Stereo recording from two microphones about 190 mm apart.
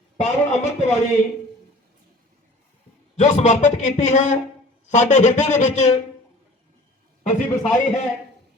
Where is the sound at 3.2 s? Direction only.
40° left (ahead or behind).